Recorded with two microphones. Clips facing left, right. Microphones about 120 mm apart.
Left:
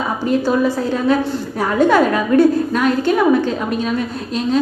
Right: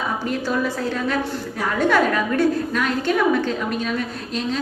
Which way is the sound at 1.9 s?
35° left (ahead or behind).